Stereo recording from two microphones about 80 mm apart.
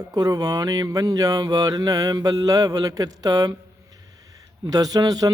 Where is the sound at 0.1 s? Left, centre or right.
Right.